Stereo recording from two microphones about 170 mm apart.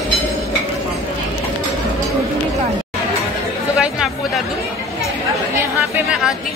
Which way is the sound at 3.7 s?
Centre (ahead or behind).